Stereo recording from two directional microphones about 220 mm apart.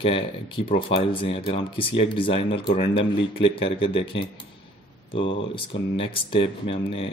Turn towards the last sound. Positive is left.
turn(degrees=25)  # may be behind; listen again after turning